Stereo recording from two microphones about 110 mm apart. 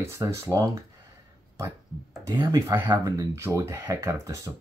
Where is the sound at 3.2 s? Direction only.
25° right (ahead or behind).